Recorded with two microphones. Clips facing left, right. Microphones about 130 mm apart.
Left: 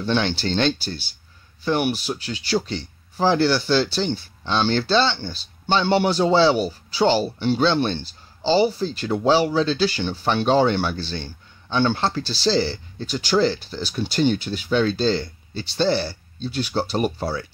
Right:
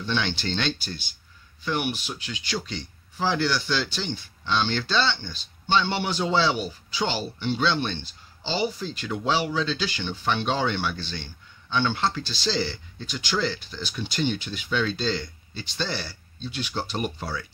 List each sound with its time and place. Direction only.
0.0 s speech: 40° left (ahead or behind)